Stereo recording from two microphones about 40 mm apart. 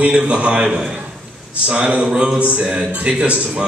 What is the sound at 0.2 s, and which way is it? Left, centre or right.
Speech, right.